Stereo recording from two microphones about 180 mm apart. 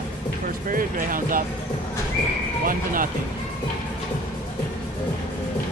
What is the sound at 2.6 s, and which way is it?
Speech, 50° right (ahead or behind).